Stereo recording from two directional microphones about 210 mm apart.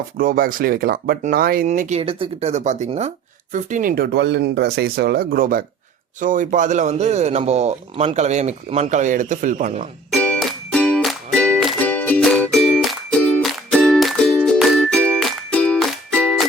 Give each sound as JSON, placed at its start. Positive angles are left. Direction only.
{"t": 0.2, "sound": "speech", "side_deg": -40}
{"t": 10.1, "sound": "music", "side_deg": 5}